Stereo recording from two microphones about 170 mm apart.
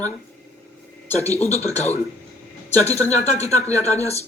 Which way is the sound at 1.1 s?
40° left (ahead or behind).